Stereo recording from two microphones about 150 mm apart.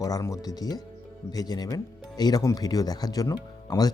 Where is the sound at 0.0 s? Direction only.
25° left (ahead or behind).